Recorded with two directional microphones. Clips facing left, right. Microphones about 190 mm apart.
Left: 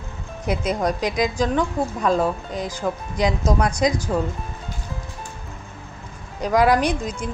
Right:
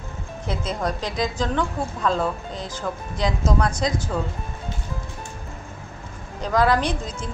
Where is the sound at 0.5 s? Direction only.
15° left (ahead or behind).